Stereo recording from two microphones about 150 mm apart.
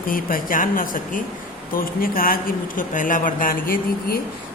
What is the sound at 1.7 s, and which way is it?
A man's voice, 75° left (ahead or behind).